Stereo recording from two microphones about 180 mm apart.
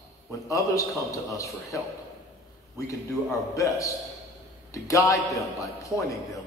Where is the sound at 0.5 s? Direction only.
20° left (ahead or behind).